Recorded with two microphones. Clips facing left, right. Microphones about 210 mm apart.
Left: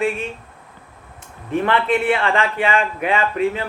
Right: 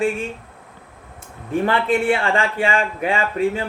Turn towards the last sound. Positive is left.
turn(degrees=-30)  # may be behind; listen again after turning